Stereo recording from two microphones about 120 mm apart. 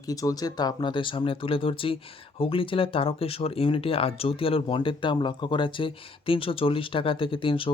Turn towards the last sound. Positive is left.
turn(degrees=45)  # may be behind; listen again after turning